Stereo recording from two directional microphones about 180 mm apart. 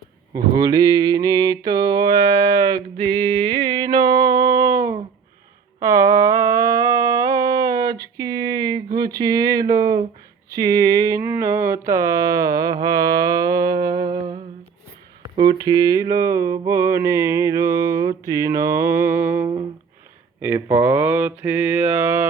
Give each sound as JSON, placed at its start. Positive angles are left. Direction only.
{"t": 0.3, "sound": "mantra", "side_deg": -20}
{"t": 5.8, "sound": "a sound", "side_deg": -15}
{"t": 10.5, "sound": "mantra", "side_deg": -20}
{"t": 15.4, "sound": "mantra", "side_deg": -25}
{"t": 18.3, "sound": "a sound", "side_deg": -15}
{"t": 20.4, "sound": "mantra", "side_deg": -15}